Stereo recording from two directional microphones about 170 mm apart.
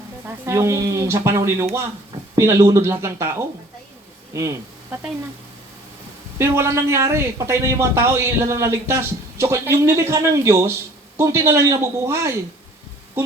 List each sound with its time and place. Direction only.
0.3 s speech: 15° right (ahead or behind)
6.4 s speech: 15° right (ahead or behind)